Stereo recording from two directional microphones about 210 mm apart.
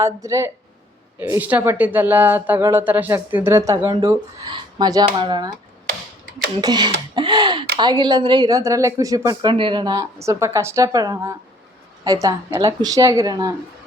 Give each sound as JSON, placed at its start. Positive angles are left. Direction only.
{"t": 0.0, "sound": "speech", "side_deg": -15}
{"t": 6.6, "sound": "speech", "side_deg": -20}